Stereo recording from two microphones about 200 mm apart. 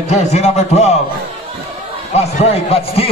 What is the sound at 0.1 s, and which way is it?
Speech, 35° left (ahead or behind).